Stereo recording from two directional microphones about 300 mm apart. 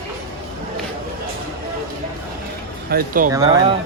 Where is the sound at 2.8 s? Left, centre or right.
Right.